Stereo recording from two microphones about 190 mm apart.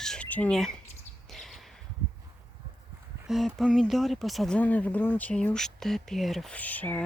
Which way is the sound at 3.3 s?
Centre (ahead or behind).